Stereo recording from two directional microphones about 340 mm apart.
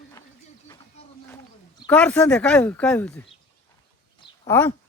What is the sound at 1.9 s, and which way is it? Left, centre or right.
Speech, centre.